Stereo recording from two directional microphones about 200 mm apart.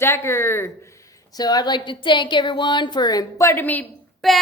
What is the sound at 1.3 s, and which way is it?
Speech, 20° left (ahead or behind).